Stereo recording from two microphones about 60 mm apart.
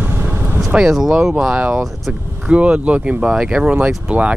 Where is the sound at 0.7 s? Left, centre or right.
Centre.